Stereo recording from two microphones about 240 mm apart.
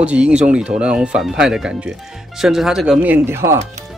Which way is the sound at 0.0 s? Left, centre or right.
Centre.